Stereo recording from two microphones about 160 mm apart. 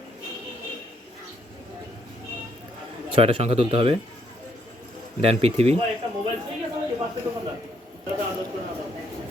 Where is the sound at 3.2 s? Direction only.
35° right (ahead or behind).